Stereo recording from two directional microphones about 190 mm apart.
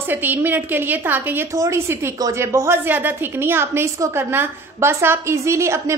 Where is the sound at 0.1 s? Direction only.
10° right (ahead or behind).